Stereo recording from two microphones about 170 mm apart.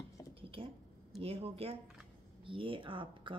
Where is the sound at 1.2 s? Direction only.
35° right (ahead or behind).